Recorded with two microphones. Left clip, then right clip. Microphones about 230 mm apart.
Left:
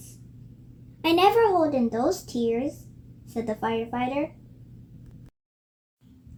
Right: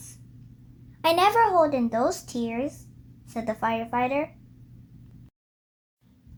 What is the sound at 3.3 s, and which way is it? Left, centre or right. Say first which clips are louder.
Speech: right 1 dB; right.